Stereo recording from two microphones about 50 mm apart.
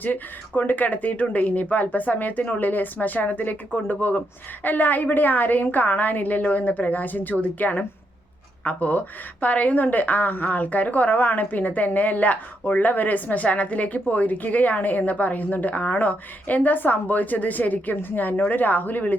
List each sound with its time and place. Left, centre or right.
0.0 s a woman's voice: left